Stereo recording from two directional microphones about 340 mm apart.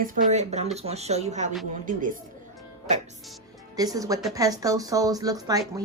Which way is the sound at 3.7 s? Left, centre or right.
Centre.